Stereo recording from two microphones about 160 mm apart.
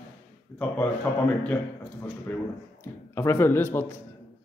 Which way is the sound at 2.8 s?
15° left (ahead or behind).